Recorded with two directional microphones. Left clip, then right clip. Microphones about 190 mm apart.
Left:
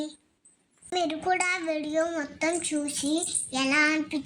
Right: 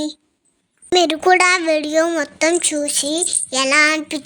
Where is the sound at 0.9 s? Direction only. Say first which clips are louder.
Right 13 dB; 60° right (ahead or behind).